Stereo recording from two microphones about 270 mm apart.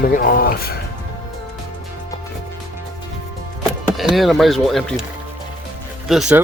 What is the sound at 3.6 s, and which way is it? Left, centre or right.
Speech, centre.